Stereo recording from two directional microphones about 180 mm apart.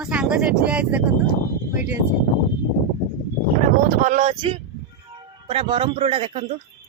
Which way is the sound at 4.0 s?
40° right (ahead or behind).